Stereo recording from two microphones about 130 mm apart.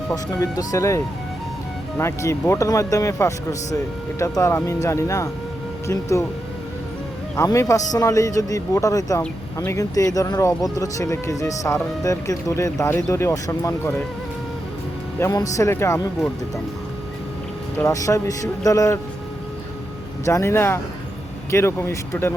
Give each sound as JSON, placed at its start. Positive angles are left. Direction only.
{"t": 0.1, "sound": "speech", "side_deg": 25}
{"t": 7.3, "sound": "speech", "side_deg": 25}
{"t": 15.2, "sound": "speech", "side_deg": 25}
{"t": 17.8, "sound": "speech", "side_deg": 25}
{"t": 20.2, "sound": "speech", "side_deg": 20}